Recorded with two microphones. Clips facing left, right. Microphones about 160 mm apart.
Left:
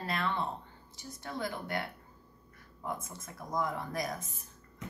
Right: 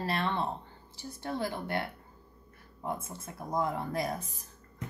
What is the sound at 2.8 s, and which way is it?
Speech, 30° right (ahead or behind).